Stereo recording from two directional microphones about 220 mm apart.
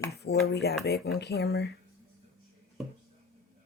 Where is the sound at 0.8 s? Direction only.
45° left (ahead or behind).